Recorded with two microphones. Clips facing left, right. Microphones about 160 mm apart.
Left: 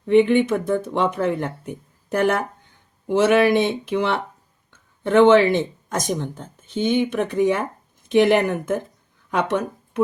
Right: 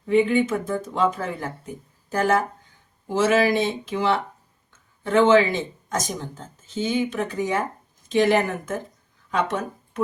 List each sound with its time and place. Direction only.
0.1 s speech: 65° left (ahead or behind)